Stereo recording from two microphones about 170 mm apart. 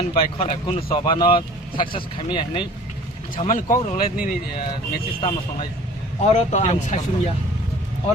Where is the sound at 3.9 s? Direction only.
55° left (ahead or behind).